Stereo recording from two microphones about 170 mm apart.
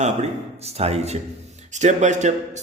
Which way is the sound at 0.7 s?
40° right (ahead or behind).